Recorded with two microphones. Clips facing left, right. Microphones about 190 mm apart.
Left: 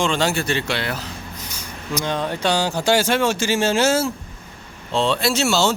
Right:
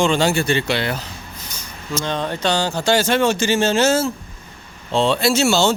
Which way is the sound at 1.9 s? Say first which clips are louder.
Even; 10° left (ahead or behind).